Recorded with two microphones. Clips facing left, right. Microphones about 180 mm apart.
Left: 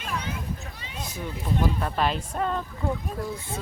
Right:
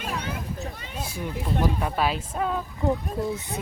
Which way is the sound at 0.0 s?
45° right (ahead or behind).